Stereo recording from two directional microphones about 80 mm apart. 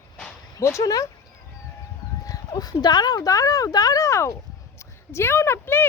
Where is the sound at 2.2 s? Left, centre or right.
Left.